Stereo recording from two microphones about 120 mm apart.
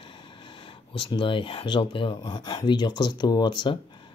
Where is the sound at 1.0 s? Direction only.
40° left (ahead or behind).